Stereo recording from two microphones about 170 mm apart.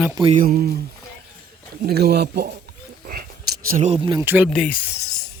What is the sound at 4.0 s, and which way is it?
Speech, 25° right (ahead or behind).